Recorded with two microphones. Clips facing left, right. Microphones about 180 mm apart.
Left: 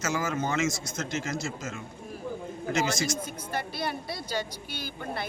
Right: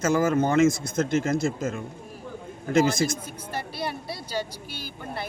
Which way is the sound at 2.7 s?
55° right (ahead or behind).